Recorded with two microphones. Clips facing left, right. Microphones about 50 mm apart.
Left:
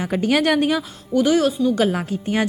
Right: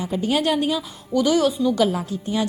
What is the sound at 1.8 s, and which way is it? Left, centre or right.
Speech, left.